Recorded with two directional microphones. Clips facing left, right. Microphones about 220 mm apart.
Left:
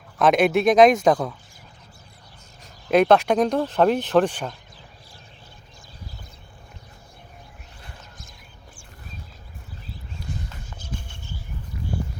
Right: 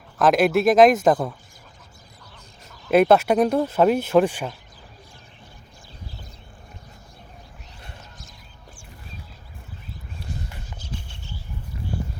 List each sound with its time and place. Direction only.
0.2 s speech: centre (ahead or behind)
2.9 s speech: 5° right (ahead or behind)
10.8 s horse: 50° left (ahead or behind)